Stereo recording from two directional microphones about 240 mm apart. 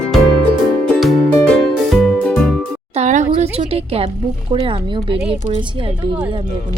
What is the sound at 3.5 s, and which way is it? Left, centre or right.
Speech, right.